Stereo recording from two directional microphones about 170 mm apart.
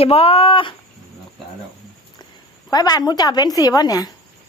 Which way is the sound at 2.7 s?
20° left (ahead or behind).